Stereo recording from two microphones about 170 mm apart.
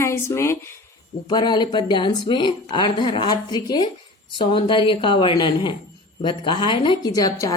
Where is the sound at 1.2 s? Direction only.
25° left (ahead or behind).